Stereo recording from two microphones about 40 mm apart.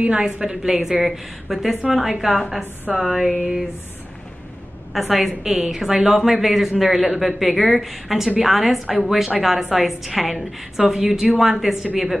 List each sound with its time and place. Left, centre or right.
0.0 s a woman's voice: right
0.6 s a woman's voice: centre
4.9 s a woman's voice: centre